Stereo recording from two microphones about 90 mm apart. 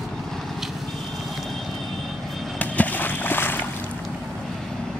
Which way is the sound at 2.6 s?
20° left (ahead or behind).